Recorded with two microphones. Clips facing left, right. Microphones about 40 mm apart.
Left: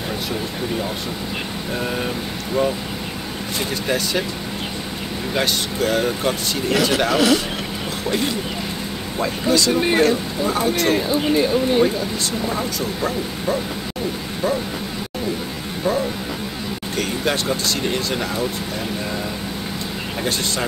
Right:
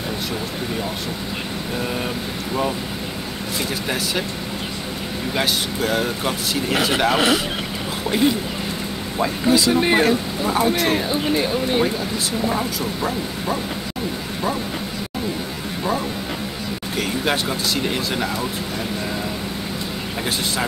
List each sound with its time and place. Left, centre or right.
5.3 s speech: centre
6.7 s speech: centre
9.2 s speech: centre
16.9 s speech: centre